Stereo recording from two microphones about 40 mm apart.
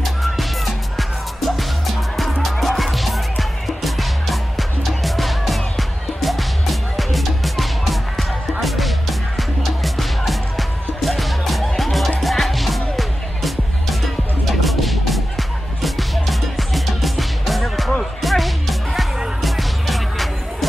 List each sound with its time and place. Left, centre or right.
0.0 s music: centre